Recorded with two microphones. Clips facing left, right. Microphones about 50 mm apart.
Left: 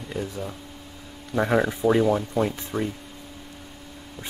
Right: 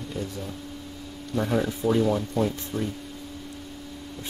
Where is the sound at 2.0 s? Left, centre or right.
Left.